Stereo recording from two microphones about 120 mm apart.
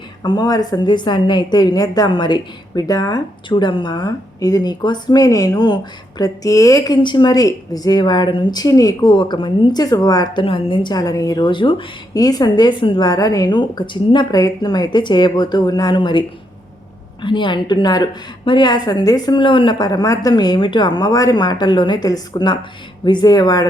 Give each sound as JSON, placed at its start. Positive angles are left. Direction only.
{"t": 0.2, "sound": "a woman's voice", "side_deg": 35}
{"t": 10.4, "sound": "a woman's voice", "side_deg": 45}
{"t": 17.2, "sound": "a woman's voice", "side_deg": 40}